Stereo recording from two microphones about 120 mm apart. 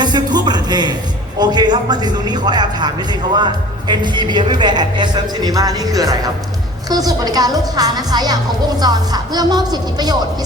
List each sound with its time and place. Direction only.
0.0 s a man's voice: 35° right (ahead or behind)